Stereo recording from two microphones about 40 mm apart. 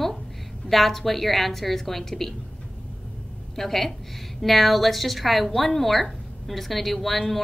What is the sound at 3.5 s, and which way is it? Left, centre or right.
A woman's voice, centre.